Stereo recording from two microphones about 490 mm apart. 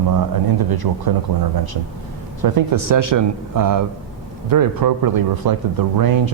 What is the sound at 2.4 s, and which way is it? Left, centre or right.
A man's voice, right.